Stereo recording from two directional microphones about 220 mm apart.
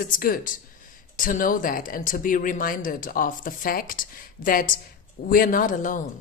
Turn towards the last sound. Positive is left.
turn(degrees=35)  # may be behind; listen again after turning